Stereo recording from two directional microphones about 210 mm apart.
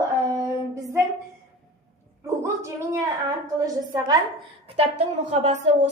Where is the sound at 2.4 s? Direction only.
15° right (ahead or behind).